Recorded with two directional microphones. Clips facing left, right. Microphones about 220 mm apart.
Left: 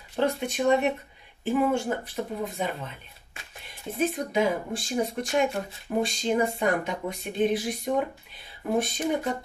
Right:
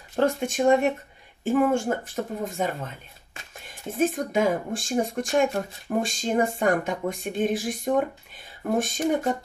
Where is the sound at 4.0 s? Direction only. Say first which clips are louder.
Right 2 dB; 50° right (ahead or behind).